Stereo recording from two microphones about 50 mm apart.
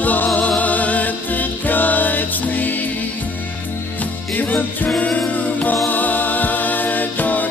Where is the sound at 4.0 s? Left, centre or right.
Left.